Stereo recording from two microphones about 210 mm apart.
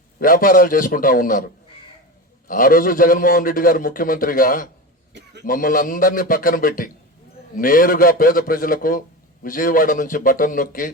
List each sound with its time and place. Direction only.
0.2 s a man's voice: 40° left (ahead or behind)
2.5 s a man's voice: 40° left (ahead or behind)